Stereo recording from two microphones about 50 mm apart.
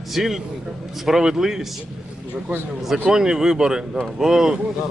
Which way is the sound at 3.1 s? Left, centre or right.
Centre.